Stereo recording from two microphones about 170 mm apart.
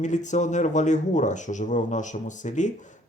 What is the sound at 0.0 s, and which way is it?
Speech, 45° left (ahead or behind).